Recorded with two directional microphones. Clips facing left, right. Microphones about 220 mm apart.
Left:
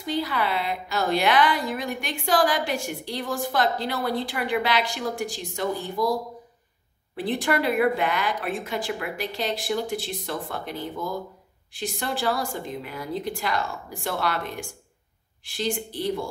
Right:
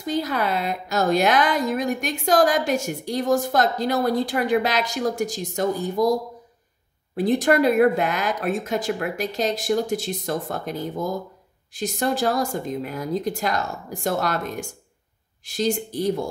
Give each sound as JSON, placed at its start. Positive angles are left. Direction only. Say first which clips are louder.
{"t": 0.0, "sound": "a woman's voice", "louder": "right 3 dB", "side_deg": -45}
{"t": 7.2, "sound": "a woman's voice", "louder": "right 6 dB", "side_deg": -40}